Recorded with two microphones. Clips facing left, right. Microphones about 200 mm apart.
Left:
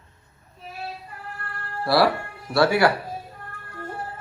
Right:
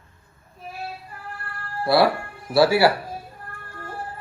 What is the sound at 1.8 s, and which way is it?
Speech, 25° right (ahead or behind).